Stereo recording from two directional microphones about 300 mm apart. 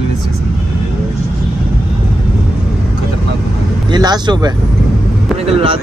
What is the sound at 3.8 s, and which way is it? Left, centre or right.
Speech, centre.